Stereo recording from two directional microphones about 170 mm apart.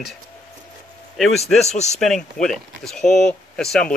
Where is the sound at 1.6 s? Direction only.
40° left (ahead or behind).